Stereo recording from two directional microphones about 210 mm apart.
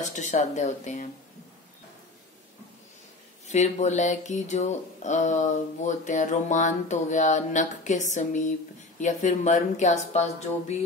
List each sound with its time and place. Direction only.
0.0 s speech: 35° left (ahead or behind)
3.4 s speech: 35° left (ahead or behind)